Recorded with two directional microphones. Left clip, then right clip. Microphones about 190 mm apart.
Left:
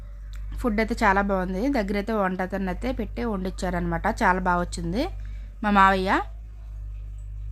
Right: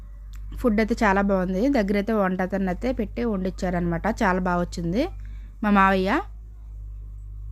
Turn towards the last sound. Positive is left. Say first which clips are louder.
# left 1 dB
turn(degrees=-10)  # may be behind; listen again after turning